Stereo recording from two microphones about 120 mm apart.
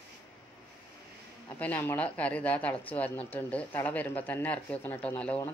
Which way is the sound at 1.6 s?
15° left (ahead or behind).